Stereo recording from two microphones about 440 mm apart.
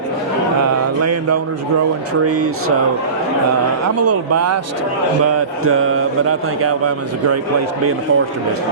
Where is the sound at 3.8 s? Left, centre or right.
Right.